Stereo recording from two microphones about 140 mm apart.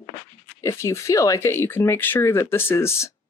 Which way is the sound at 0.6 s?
20° left (ahead or behind).